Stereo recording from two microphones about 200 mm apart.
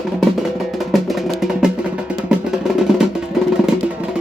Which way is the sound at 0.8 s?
Centre (ahead or behind).